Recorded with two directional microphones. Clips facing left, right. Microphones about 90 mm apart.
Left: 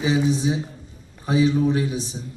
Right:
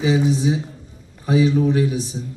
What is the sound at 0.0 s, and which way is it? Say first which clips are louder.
A man's voice: right 2 dB; 25° left (ahead or behind).